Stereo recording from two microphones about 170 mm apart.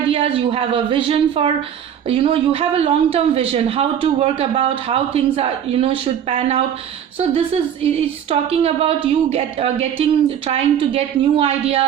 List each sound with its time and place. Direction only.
0.1 s speech: 35° right (ahead or behind)